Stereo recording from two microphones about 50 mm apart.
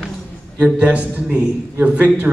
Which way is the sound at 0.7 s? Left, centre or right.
Right.